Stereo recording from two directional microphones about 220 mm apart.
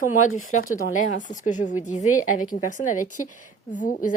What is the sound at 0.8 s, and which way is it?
A woman's voice, 35° left (ahead or behind).